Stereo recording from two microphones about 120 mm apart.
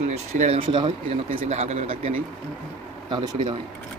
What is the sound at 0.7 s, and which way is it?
Speech, 45° right (ahead or behind).